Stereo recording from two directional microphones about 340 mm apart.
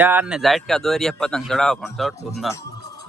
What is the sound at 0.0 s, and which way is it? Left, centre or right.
Speech, centre.